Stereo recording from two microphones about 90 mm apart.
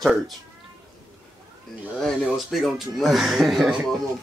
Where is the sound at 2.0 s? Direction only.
5° right (ahead or behind).